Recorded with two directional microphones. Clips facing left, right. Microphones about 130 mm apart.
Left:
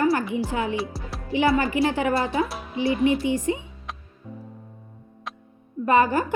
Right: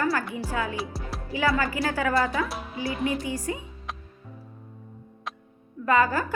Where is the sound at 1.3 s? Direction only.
25° left (ahead or behind).